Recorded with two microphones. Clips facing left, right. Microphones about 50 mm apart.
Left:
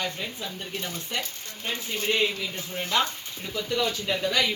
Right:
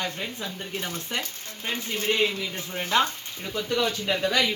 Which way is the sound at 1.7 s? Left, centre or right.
Centre.